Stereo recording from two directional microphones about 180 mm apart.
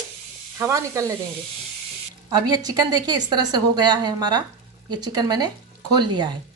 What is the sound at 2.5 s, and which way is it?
A woman's voice, 20° right (ahead or behind).